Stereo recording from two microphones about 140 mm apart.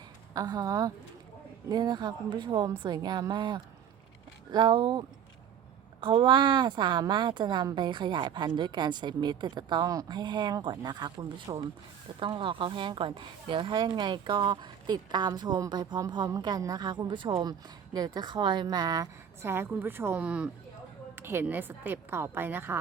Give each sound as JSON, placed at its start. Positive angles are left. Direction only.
{"t": 0.3, "sound": "a woman's voice", "side_deg": -30}